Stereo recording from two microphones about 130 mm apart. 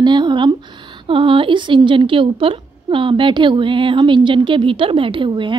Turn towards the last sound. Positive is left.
turn(degrees=-40)  # may be behind; listen again after turning